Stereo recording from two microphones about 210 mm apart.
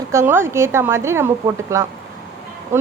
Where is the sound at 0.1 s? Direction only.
10° right (ahead or behind).